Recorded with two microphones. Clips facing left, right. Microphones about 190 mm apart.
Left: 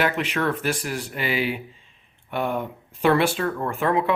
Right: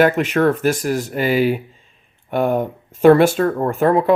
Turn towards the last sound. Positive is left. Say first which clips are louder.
# right 7 dB
turn(degrees=-40)  # may be behind; listen again after turning